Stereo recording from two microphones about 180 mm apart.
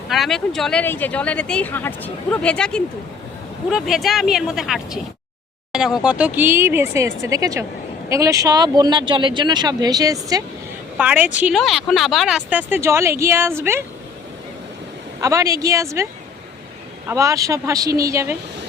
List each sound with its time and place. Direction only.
0.1 s speech: centre (ahead or behind); by 10.4 s 20° right (ahead or behind)
10.9 s speech: 10° right (ahead or behind)
15.2 s speech: 20° right (ahead or behind)
17.1 s speech: 15° right (ahead or behind)